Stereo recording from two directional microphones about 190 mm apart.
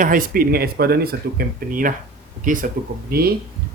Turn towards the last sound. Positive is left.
turn(degrees=-55)  # may be behind; listen again after turning